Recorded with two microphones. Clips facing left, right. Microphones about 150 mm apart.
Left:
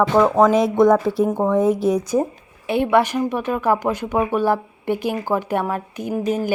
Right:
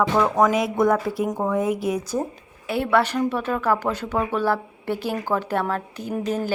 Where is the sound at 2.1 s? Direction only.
25° left (ahead or behind).